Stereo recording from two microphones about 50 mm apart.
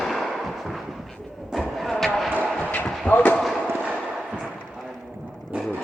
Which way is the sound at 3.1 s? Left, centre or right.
Left.